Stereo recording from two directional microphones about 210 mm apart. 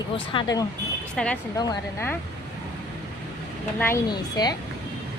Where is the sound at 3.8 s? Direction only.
15° left (ahead or behind).